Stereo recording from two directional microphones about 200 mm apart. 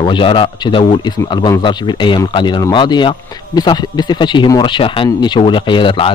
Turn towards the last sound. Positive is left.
turn(degrees=25)  # may be behind; listen again after turning